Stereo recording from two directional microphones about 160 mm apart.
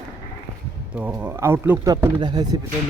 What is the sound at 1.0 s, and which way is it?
Speech, 10° right (ahead or behind).